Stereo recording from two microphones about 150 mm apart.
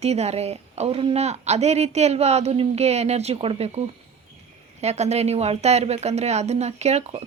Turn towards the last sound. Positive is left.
turn(degrees=-45)  # may be behind; listen again after turning